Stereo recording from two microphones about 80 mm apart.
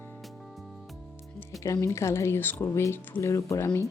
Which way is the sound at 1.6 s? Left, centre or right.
Left.